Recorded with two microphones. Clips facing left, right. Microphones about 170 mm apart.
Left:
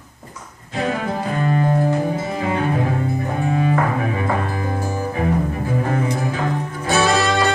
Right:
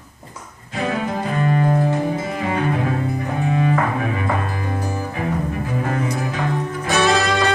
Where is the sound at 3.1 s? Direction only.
30° left (ahead or behind).